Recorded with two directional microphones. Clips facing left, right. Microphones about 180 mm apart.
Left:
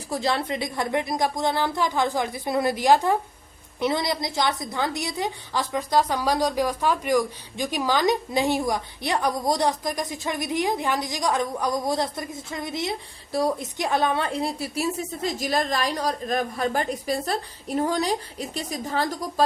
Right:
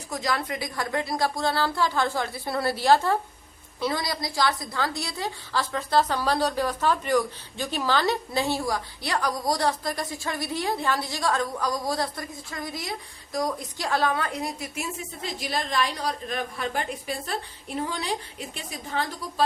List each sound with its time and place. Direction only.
0.1 s a woman's voice: 30° left (ahead or behind)